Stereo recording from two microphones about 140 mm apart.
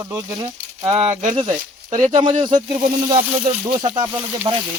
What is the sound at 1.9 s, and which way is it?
Speech, 25° right (ahead or behind).